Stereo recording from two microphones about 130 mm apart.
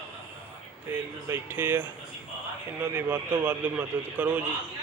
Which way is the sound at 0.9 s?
15° right (ahead or behind).